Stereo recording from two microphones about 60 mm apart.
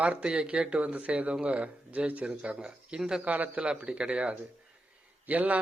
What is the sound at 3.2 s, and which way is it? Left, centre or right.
A man's voice, right.